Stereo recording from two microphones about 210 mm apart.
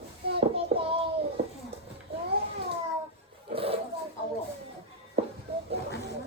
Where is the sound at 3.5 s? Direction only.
25° right (ahead or behind).